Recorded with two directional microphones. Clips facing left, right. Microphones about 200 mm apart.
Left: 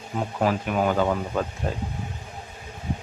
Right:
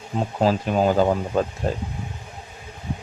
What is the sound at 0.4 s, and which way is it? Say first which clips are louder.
Speech: right 4 dB; 30° right (ahead or behind).